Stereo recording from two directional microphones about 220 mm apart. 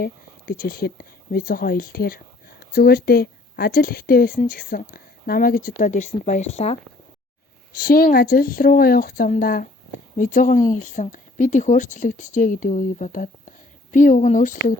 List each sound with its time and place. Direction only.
0.0 s speech: 40° left (ahead or behind)
7.8 s speech: 40° left (ahead or behind)